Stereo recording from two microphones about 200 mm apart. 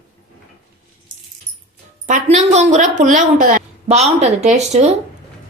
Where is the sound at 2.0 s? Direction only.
35° right (ahead or behind).